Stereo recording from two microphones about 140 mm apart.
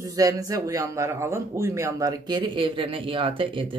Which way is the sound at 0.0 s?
25° right (ahead or behind).